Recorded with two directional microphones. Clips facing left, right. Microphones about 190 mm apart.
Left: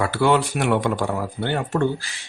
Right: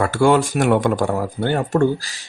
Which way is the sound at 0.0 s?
45° right (ahead or behind).